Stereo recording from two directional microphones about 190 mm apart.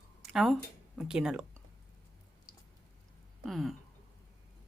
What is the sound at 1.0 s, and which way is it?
Speech, 5° right (ahead or behind).